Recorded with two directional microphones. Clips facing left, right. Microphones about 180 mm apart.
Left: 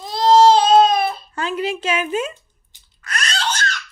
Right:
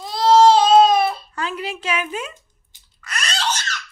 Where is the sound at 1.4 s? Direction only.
20° left (ahead or behind).